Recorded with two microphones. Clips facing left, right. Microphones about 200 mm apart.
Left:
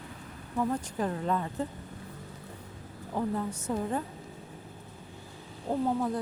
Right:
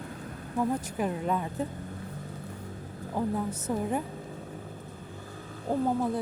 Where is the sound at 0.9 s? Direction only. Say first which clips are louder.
Right 1 dB; 10° right (ahead or behind).